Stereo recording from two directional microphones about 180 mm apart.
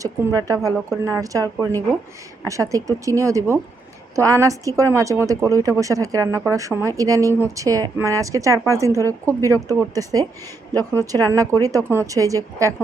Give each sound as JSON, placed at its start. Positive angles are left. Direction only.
{"t": 0.0, "sound": "speech", "side_deg": -20}